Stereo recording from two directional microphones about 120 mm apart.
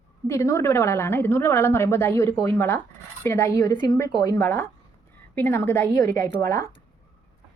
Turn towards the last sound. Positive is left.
turn(degrees=25)  # may be behind; listen again after turning